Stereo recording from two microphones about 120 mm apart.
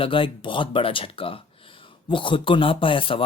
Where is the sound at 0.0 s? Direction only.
45° left (ahead or behind).